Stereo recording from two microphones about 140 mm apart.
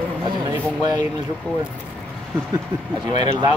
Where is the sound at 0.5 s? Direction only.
30° right (ahead or behind).